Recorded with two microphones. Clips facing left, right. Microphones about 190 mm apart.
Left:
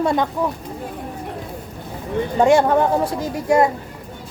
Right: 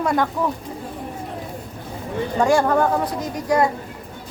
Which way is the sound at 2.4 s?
20° left (ahead or behind).